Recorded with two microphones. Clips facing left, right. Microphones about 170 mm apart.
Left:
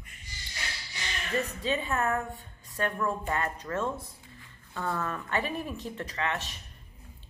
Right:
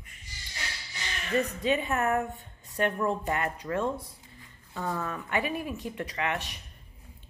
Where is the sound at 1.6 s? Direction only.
20° right (ahead or behind).